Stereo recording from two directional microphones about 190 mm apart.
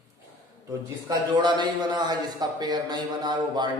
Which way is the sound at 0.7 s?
20° right (ahead or behind).